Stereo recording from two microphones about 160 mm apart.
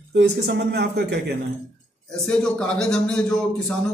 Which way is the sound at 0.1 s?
90° right.